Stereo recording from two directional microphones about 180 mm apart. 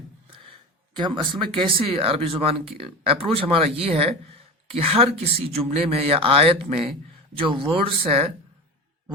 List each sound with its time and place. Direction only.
0.9 s speech: 25° right (ahead or behind)